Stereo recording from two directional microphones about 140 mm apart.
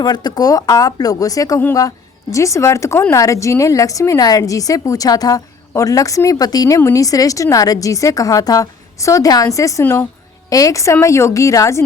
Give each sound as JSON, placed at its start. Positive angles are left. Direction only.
{"t": 0.0, "sound": "a woman's voice", "side_deg": 30}